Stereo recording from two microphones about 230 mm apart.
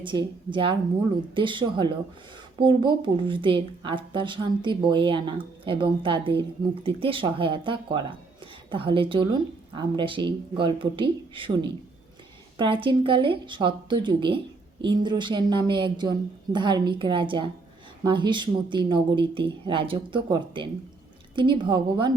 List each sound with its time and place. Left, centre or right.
0.0 s speech: right